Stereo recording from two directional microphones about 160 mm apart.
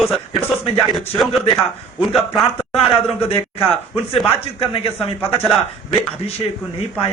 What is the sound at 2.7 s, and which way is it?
Speech, 35° left (ahead or behind).